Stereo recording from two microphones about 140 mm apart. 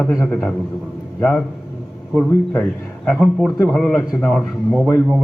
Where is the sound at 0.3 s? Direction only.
10° left (ahead or behind).